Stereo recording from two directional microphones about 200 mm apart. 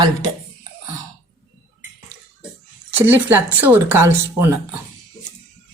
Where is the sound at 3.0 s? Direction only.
10° right (ahead or behind).